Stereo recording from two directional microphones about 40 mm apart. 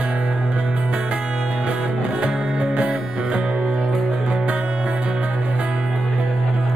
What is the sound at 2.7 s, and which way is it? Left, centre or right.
Music, right.